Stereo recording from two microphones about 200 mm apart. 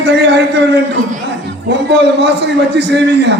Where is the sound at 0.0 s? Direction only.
60° right (ahead or behind).